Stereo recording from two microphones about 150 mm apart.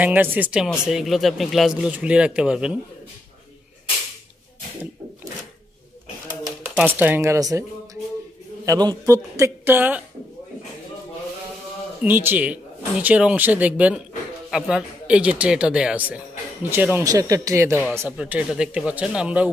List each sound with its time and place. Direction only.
0.0 s speech: 10° right (ahead or behind)
6.8 s speech: 10° right (ahead or behind)
12.0 s speech: 15° right (ahead or behind)